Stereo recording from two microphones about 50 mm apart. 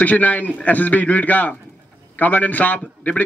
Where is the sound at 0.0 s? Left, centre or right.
Left.